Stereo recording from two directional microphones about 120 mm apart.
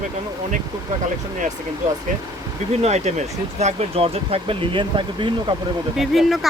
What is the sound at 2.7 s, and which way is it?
Speech, 65° right (ahead or behind).